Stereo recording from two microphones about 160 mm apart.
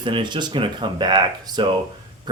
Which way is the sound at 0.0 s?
30° right (ahead or behind).